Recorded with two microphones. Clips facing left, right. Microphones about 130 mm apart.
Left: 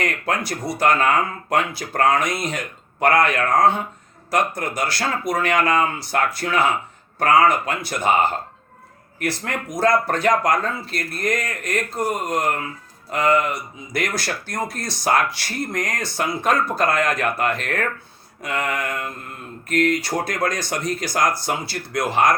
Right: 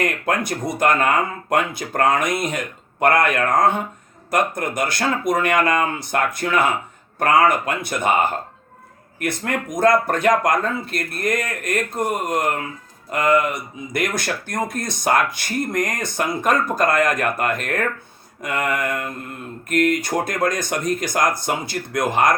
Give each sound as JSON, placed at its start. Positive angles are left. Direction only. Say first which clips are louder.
{"t": 0.0, "sound": "speech", "louder": "right 2 dB", "side_deg": -50}